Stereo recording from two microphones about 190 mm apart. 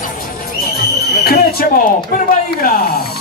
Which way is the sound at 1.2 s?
55° left (ahead or behind).